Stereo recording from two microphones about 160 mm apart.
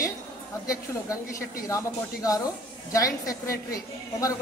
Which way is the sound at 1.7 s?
20° left (ahead or behind).